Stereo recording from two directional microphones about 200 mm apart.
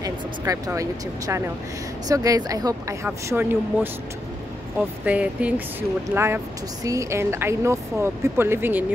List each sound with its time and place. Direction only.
0.0 s speech: 15° right (ahead or behind)